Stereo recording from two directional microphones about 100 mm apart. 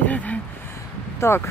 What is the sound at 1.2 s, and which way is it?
Speech, 30° left (ahead or behind).